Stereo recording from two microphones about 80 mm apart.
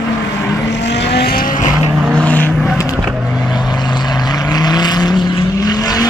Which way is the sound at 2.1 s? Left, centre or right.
Centre.